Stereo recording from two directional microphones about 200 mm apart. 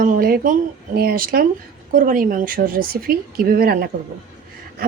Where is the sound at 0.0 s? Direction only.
45° right (ahead or behind).